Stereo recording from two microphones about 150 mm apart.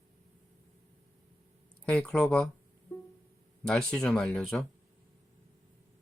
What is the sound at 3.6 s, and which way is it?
Speech, 5° left (ahead or behind).